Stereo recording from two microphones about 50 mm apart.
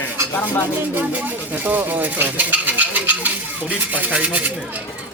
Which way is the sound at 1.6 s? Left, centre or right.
Right.